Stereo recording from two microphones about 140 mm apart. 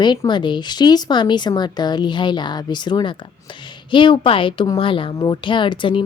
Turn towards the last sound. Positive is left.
turn(degrees=35)  # may be behind; listen again after turning